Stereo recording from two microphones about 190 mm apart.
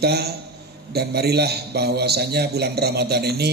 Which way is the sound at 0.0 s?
55° right (ahead or behind).